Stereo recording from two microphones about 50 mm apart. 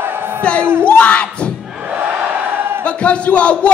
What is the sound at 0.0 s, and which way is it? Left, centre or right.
Crowd, right.